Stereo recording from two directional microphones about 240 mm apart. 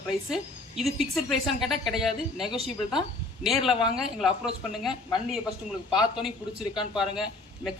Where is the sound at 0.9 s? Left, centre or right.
Centre.